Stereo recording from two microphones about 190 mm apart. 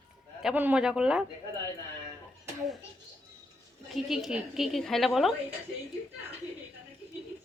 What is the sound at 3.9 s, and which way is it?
A woman's voice, centre (ahead or behind).